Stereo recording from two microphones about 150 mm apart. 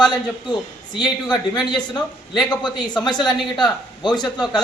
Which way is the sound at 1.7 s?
30° left (ahead or behind).